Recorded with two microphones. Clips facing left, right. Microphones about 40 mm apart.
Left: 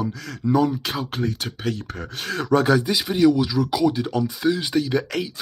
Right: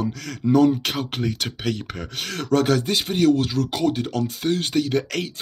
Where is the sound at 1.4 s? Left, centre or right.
Right.